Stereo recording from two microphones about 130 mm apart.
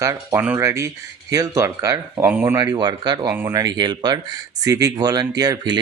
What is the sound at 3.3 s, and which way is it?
Speech, 15° right (ahead or behind).